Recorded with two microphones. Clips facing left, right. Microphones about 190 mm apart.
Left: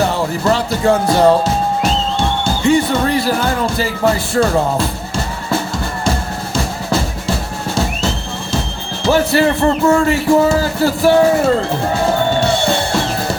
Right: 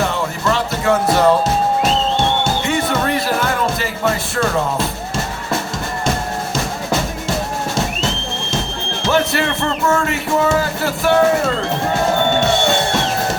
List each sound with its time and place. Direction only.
0.0 s music: 35° left (ahead or behind)
1.1 s speech: 30° left (ahead or behind)
2.6 s speech: 30° left (ahead or behind)
9.0 s speech: 35° left (ahead or behind)